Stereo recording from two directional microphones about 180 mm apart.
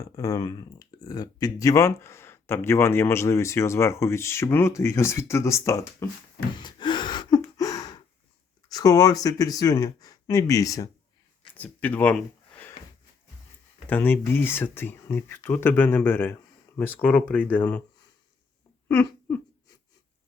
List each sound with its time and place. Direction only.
0.0 s speech: 20° left (ahead or behind)
6.6 s gasp: 25° left (ahead or behind)
8.7 s speech: 20° left (ahead or behind)
11.5 s a sound: 10° left (ahead or behind)
13.8 s speech: 10° left (ahead or behind)
18.9 s a sound: 10° left (ahead or behind)